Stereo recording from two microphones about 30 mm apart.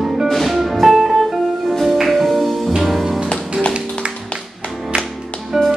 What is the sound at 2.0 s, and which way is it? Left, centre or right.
Music, centre.